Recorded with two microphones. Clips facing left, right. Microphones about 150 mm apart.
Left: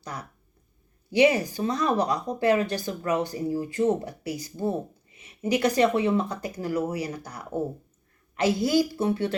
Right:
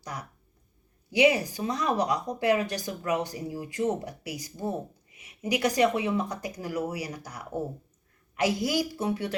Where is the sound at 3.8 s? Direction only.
30° left (ahead or behind).